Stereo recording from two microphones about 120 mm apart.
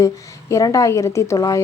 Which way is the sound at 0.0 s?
25° left (ahead or behind).